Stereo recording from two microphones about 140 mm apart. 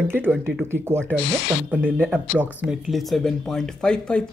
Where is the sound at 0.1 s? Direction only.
15° right (ahead or behind).